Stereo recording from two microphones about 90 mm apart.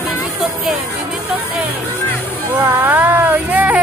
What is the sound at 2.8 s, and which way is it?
Vehicle, 20° right (ahead or behind).